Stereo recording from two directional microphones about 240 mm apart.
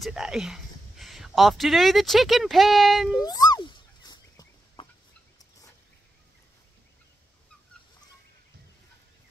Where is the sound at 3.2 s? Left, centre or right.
Centre.